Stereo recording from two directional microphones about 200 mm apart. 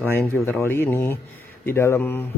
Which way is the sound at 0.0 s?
10° left (ahead or behind).